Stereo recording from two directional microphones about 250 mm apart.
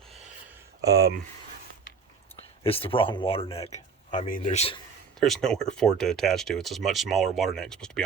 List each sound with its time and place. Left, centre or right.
0.8 s speech: centre
2.6 s speech: left
5.2 s speech: centre